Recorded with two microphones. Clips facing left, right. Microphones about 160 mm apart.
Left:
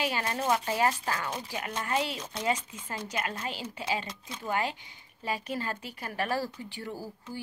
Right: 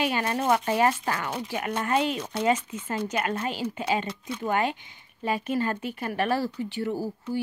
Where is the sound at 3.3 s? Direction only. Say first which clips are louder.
Right 7 dB; 55° right (ahead or behind).